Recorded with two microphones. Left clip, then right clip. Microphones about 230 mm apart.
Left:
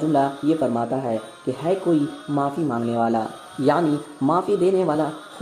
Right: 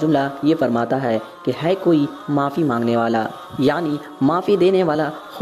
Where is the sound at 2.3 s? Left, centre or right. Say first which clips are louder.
Right 4 dB; right.